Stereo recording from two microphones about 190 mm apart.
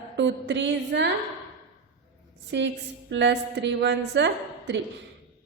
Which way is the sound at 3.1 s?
70° right (ahead or behind).